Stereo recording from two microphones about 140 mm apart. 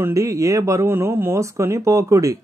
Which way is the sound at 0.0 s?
25° right (ahead or behind).